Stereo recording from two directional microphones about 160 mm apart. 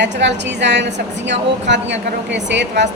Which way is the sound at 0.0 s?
90° right.